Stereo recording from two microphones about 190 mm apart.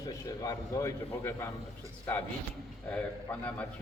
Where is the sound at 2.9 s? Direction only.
5° left (ahead or behind).